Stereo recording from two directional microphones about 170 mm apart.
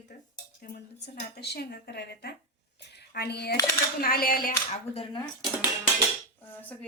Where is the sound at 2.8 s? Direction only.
75° left (ahead or behind).